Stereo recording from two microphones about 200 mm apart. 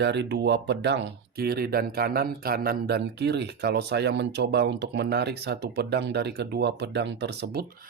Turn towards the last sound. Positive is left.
turn(degrees=-55)  # may be behind; listen again after turning